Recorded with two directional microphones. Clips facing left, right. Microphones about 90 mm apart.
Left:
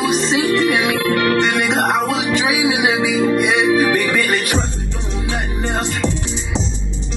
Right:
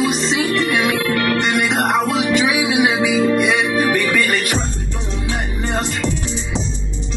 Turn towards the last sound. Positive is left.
turn(degrees=30)  # may be behind; listen again after turning